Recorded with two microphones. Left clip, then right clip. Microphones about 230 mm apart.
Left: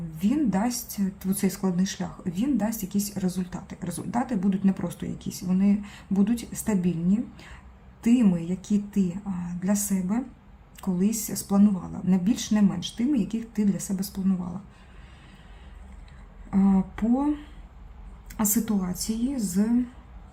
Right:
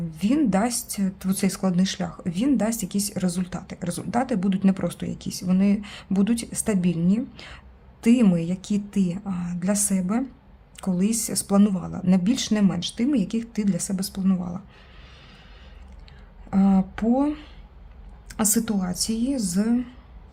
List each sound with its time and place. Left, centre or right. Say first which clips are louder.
0.2 s speech: right 4 dB; right
16.5 s speech: right 2 dB; right